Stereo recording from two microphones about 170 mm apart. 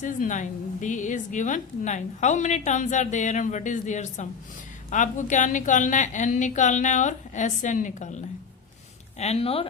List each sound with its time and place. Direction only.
0.0 s speech: 50° left (ahead or behind)